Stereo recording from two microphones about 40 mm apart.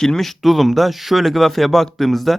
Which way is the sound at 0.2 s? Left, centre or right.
Centre.